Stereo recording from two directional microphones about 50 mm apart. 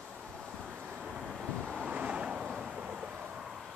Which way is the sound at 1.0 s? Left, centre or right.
Centre.